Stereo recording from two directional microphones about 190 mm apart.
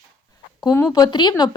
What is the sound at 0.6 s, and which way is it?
Speech, 15° left (ahead or behind).